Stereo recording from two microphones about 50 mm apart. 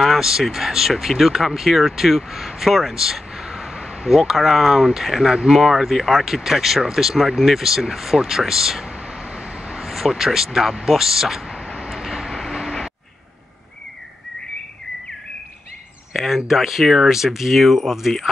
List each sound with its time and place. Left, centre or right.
0.0 s speech: centre
3.7 s a sound: centre
4.1 s speech: centre
8.8 s vehicle: right
9.8 s speech: centre
10.9 s vehicle: centre
16.1 s speech: centre